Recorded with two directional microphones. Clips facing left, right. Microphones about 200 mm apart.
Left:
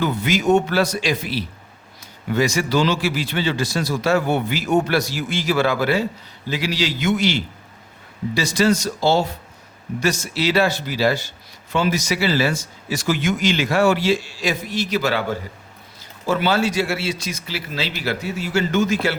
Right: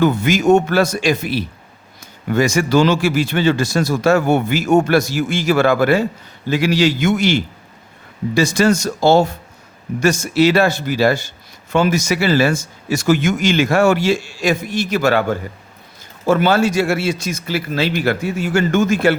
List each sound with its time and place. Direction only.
0.0 s a man's voice: 50° right (ahead or behind)